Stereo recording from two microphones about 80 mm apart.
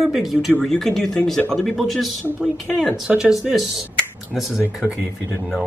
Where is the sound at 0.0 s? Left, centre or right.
Centre.